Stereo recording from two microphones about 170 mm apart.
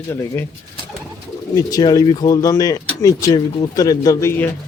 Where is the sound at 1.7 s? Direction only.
20° left (ahead or behind).